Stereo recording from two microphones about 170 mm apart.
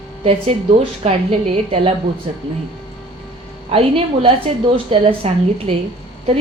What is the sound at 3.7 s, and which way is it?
A woman's voice, 35° right (ahead or behind).